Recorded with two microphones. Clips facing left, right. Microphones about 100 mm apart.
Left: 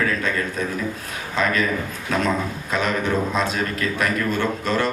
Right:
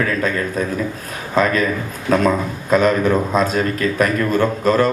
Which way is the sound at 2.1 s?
40° right (ahead or behind).